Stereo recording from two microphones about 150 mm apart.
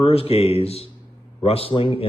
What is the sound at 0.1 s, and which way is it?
A man's voice, 40° left (ahead or behind).